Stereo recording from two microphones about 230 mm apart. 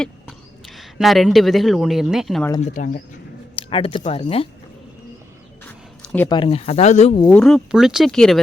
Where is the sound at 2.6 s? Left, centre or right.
Left.